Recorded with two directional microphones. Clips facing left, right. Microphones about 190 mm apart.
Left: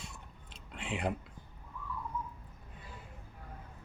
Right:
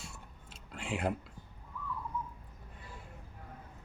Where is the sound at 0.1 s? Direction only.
Centre (ahead or behind).